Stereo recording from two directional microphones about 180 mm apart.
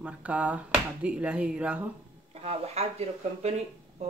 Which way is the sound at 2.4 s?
35° right (ahead or behind).